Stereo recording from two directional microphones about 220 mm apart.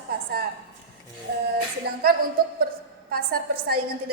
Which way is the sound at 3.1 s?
45° right (ahead or behind).